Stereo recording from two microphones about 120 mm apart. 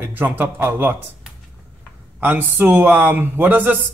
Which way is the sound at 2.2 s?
20° right (ahead or behind).